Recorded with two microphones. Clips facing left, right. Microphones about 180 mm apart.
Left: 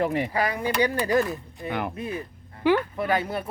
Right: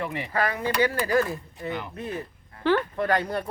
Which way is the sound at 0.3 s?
15° left (ahead or behind).